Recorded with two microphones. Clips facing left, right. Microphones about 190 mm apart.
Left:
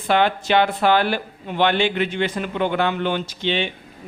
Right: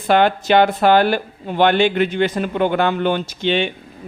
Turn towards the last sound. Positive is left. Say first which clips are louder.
# right 4 dB
turn(degrees=-50)  # may be behind; listen again after turning